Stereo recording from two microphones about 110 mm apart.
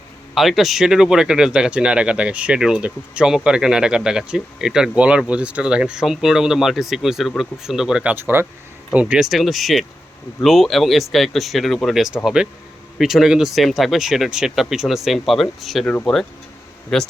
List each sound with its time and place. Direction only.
0.3 s speech: centre (ahead or behind)
8.1 s speech: 20° right (ahead or behind); by 15.9 s centre (ahead or behind)
16.9 s speech: 5° left (ahead or behind)